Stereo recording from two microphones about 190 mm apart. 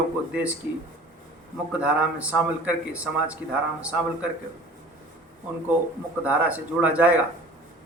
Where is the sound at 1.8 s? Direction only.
5° right (ahead or behind).